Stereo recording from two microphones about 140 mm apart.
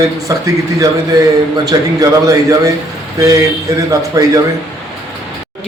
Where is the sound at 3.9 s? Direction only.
25° right (ahead or behind).